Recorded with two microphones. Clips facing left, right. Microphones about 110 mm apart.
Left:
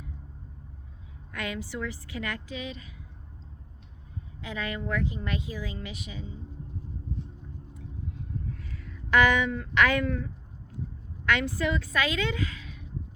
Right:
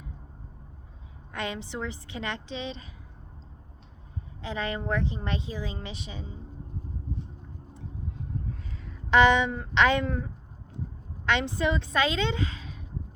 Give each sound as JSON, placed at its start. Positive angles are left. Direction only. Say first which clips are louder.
{"t": 1.3, "sound": "a woman's voice", "louder": "right 1 dB", "side_deg": -25}
{"t": 4.4, "sound": "a woman's voice", "louder": "right 2 dB", "side_deg": -30}
{"t": 8.5, "sound": "a sound", "louder": "even", "side_deg": -25}
{"t": 9.0, "sound": "a woman's voice", "louder": "right 3 dB", "side_deg": -25}
{"t": 11.3, "sound": "a woman's voice", "louder": "right 1 dB", "side_deg": -25}